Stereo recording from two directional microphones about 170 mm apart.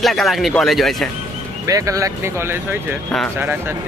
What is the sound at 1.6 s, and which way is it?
Speech, 20° right (ahead or behind).